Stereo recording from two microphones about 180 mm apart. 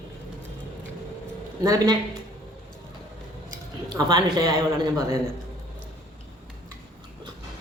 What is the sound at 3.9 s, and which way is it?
A woman's voice, 20° right (ahead or behind).